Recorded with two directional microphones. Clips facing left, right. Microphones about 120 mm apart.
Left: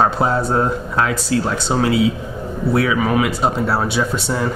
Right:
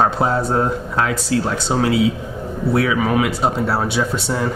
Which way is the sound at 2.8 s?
15° left (ahead or behind).